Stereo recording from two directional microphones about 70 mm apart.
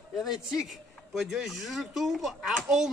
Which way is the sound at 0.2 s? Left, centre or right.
Centre.